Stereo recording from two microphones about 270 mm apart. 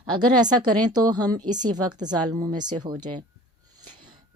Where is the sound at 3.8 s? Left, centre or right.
Centre.